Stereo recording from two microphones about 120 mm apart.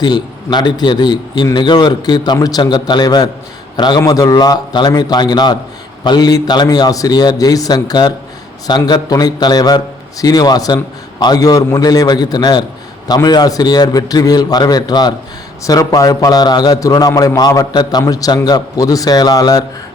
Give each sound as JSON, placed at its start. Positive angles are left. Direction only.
{"t": 0.0, "sound": "a man's voice", "side_deg": 35}